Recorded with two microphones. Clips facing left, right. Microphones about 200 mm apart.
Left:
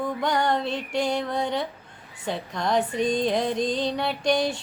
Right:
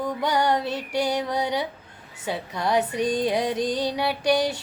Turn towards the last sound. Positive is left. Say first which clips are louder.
# right 1 dB
turn(degrees=-5)  # may be behind; listen again after turning